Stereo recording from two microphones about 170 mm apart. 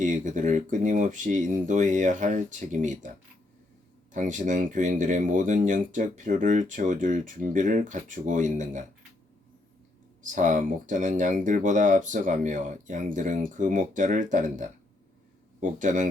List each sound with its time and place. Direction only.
0.0 s speech: 50° right (ahead or behind)
4.1 s speech: 50° right (ahead or behind)
10.2 s speech: 45° right (ahead or behind)